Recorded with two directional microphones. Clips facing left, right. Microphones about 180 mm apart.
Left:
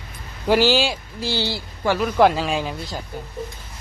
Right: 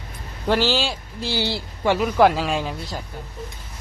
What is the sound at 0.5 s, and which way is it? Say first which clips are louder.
Speech: left 4 dB; 10° left (ahead or behind).